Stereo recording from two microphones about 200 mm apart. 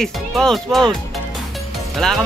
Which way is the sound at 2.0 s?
5° left (ahead or behind).